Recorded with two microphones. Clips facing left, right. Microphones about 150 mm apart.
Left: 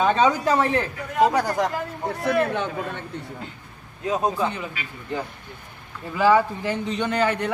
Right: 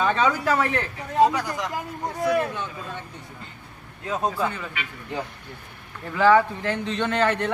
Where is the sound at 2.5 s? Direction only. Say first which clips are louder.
Left 6 dB; 60° left (ahead or behind).